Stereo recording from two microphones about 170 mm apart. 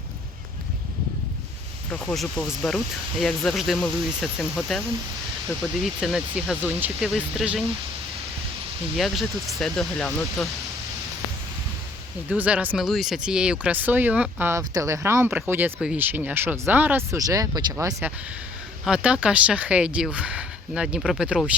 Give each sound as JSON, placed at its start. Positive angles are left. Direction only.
{"t": 1.9, "sound": "speech", "side_deg": 5}
{"t": 5.8, "sound": "speech", "side_deg": 0}
{"t": 9.0, "sound": "speech", "side_deg": 0}
{"t": 12.3, "sound": "speech", "side_deg": -5}
{"t": 18.9, "sound": "speech", "side_deg": -5}